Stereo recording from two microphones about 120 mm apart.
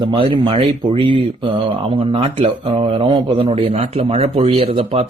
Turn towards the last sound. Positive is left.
turn(degrees=-55)  # may be behind; listen again after turning